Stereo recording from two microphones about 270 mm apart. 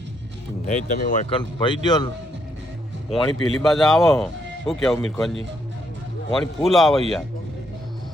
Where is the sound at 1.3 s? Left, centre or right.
Centre.